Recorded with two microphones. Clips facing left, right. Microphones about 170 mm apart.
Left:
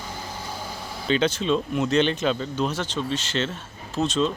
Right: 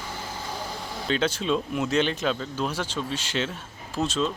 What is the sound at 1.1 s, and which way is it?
Speech, 5° right (ahead or behind).